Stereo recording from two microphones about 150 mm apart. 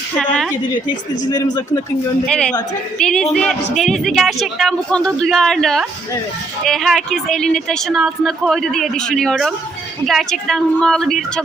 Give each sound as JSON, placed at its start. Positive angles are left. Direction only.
{"t": 1.3, "sound": "speech", "side_deg": 25}
{"t": 2.2, "sound": "a woman's voice", "side_deg": 5}